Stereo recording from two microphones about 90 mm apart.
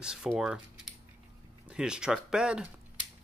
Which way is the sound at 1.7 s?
10° right (ahead or behind).